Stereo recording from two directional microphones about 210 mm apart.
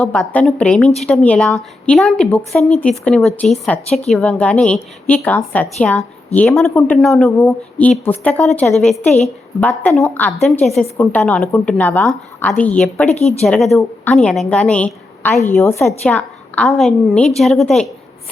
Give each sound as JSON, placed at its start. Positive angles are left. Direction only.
{"t": 0.0, "sound": "a woman's voice", "side_deg": 5}
{"t": 13.1, "sound": "speech", "side_deg": 30}
{"t": 13.4, "sound": "a woman's voice", "side_deg": 0}